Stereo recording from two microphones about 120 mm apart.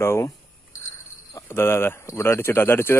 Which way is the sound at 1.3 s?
20° left (ahead or behind).